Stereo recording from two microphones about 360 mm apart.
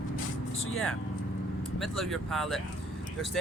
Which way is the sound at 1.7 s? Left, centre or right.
Centre.